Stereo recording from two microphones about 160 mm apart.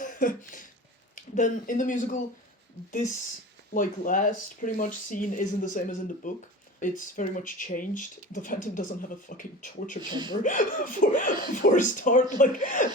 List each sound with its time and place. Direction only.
0.0 s a sound: 55° left (ahead or behind)
1.4 s a man's voice: 55° left (ahead or behind)
3.8 s speech: 55° left (ahead or behind)
10.0 s speech: 30° right (ahead or behind)
10.4 s speech: 55° left (ahead or behind)